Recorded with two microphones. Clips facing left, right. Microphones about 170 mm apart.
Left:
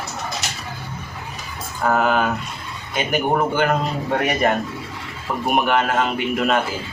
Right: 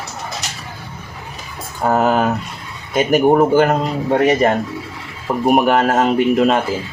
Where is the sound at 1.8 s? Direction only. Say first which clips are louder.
Right 3 dB; 35° right (ahead or behind).